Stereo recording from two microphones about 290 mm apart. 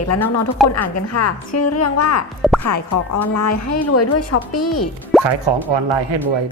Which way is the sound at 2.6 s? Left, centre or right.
Left.